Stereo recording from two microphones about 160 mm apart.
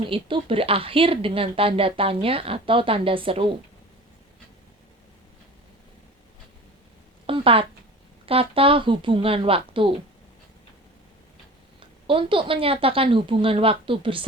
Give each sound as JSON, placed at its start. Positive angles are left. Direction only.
{"t": 0.0, "sound": "speech", "side_deg": -35}
{"t": 7.3, "sound": "a sound", "side_deg": -35}
{"t": 8.3, "sound": "speech", "side_deg": -35}
{"t": 12.0, "sound": "speech", "side_deg": -30}